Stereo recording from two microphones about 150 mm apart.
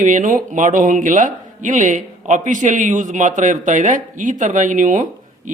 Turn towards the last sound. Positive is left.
turn(degrees=-60)  # may be behind; listen again after turning